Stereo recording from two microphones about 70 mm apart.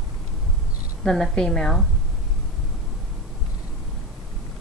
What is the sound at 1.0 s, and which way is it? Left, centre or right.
Speech, centre.